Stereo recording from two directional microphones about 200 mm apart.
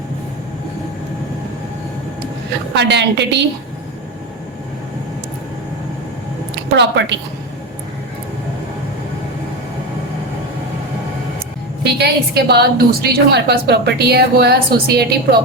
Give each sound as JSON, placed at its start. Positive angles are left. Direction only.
{"t": 2.7, "sound": "a woman's voice", "side_deg": -60}
{"t": 6.7, "sound": "a woman's voice", "side_deg": -60}
{"t": 11.8, "sound": "a woman's voice", "side_deg": -55}